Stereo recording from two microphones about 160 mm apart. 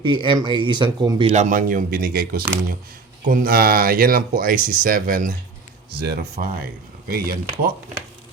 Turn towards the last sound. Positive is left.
turn(degrees=-65)  # may be behind; listen again after turning